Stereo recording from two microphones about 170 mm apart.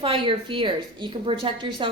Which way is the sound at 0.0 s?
30° right (ahead or behind).